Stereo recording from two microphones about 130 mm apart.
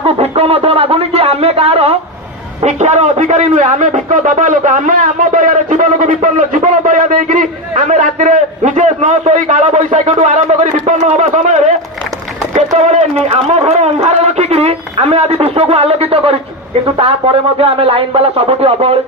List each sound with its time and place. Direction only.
0.0 s a sound: 50° right (ahead or behind)
2.6 s a man's voice: 60° right (ahead or behind)
12.7 s speech: 60° right (ahead or behind)